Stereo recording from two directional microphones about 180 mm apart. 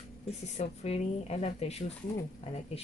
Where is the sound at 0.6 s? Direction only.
35° left (ahead or behind).